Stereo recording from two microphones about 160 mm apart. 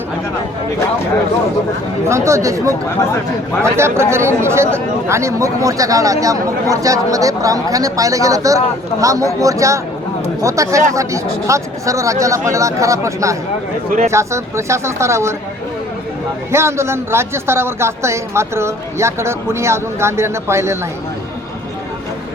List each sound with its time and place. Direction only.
2.0 s speech: 15° right (ahead or behind)
16.5 s speech: 15° right (ahead or behind)